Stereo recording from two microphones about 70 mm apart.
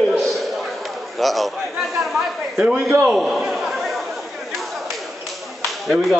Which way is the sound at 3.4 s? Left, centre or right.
Centre.